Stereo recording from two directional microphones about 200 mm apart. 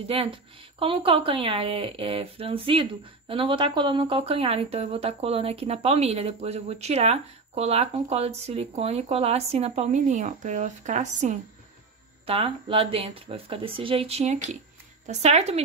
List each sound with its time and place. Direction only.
0.1 s speech: 25° right (ahead or behind)